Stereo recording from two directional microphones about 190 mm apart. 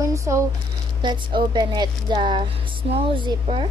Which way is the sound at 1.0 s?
25° right (ahead or behind).